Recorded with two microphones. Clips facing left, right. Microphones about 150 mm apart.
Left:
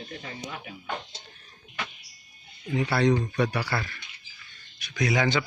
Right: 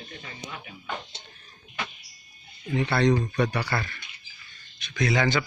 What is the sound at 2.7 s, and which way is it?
A man's voice, 10° left (ahead or behind).